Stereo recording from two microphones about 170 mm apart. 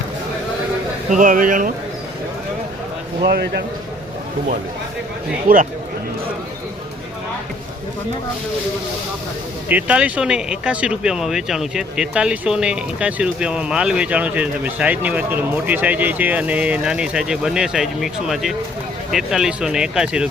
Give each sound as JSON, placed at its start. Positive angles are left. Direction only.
{"t": 1.1, "sound": "speech", "side_deg": -50}
{"t": 3.2, "sound": "speech", "side_deg": -70}
{"t": 5.5, "sound": "a man's voice", "side_deg": -55}
{"t": 9.6, "sound": "speech", "side_deg": -10}